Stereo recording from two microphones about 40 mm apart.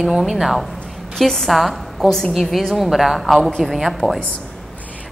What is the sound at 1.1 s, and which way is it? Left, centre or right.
Speech, centre.